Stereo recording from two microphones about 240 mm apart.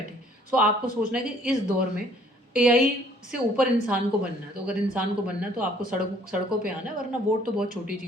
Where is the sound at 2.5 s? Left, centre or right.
Centre.